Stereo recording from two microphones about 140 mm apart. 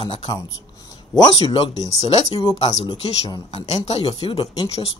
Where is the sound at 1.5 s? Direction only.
45° left (ahead or behind).